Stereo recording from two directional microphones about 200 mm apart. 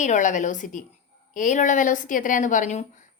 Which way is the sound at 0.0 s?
40° left (ahead or behind).